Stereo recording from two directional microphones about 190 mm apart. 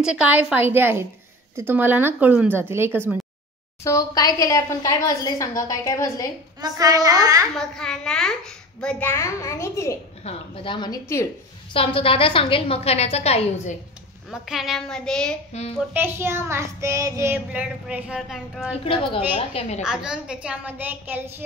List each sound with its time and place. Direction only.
0.0 s child singing: 5° right (ahead or behind)
3.8 s a woman's voice: 20° left (ahead or behind)
6.6 s a child's voice: 20° right (ahead or behind)
7.5 s a woman's voice: 5° left (ahead or behind)
9.1 s a woman's voice: 15° left (ahead or behind)
10.2 s a woman's voice: 30° left (ahead or behind)
11.7 s a woman's voice: 30° left (ahead or behind)
14.3 s a woman's voice: centre (ahead or behind)
15.5 s a child's voice: 35° left (ahead or behind)
15.9 s child singing: 10° right (ahead or behind)
18.9 s a woman's voice: 25° left (ahead or behind)
19.8 s a woman's voice: 5° right (ahead or behind)
20.4 s child singing: 10° right (ahead or behind)